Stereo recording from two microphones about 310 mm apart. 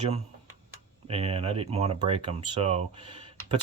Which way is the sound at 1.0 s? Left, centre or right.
Centre.